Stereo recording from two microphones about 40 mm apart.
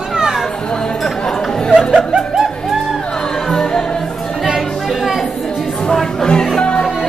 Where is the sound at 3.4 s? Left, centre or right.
Centre.